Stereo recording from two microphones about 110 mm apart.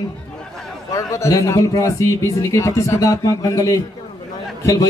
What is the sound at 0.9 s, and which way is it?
Speech, 30° left (ahead or behind).